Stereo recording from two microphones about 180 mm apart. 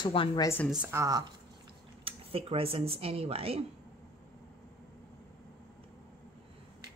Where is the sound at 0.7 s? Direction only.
10° right (ahead or behind).